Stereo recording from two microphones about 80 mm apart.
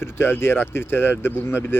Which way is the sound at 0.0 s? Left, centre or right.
Left.